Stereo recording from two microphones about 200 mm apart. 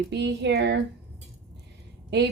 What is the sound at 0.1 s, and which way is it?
Speech, 60° right (ahead or behind).